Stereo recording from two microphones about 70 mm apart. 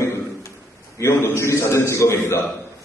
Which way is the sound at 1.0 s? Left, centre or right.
Left.